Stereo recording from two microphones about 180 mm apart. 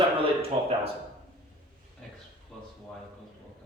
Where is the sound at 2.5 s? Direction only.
Centre (ahead or behind).